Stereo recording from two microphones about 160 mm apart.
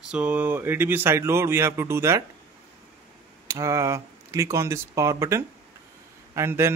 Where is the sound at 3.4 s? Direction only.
20° right (ahead or behind).